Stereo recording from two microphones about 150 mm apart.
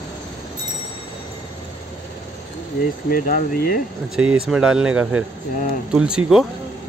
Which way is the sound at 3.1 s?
70° left (ahead or behind).